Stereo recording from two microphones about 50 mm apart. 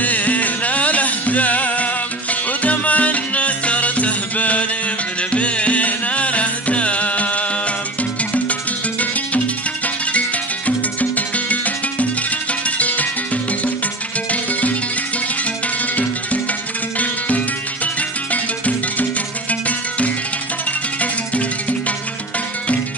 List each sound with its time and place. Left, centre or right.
0.0 s music: left
11.0 s music: left
18.3 s music: left
21.0 s music: left